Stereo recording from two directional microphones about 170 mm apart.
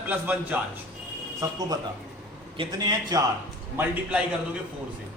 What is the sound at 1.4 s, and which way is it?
A man's voice, 20° right (ahead or behind).